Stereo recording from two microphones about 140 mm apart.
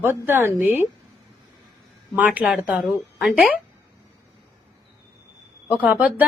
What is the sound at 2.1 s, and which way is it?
A woman's voice, 10° right (ahead or behind).